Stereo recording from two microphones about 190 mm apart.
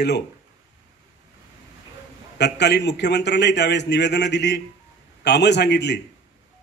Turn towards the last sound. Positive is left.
turn(degrees=65)  # may be behind; listen again after turning